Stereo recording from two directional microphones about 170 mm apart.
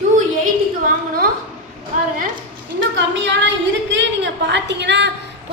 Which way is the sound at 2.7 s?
90° right.